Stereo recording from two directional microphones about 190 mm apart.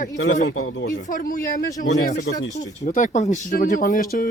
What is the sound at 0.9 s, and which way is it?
Speech, 40° left (ahead or behind).